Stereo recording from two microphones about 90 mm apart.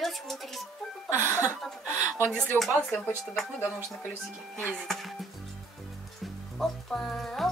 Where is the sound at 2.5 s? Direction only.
25° left (ahead or behind).